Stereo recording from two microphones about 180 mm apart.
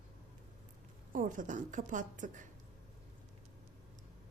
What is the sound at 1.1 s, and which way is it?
Speech, 45° right (ahead or behind).